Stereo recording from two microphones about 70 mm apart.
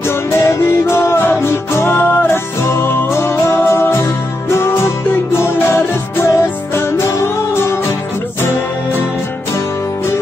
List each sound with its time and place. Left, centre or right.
0.3 s music: left